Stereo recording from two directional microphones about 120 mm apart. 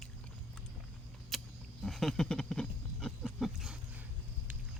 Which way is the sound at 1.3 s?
Centre (ahead or behind).